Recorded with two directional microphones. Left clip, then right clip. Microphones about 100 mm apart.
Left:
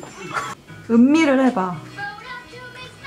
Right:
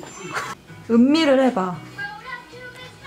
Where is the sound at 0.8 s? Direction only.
25° right (ahead or behind).